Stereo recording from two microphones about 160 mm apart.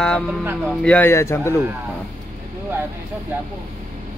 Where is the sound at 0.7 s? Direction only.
5° left (ahead or behind).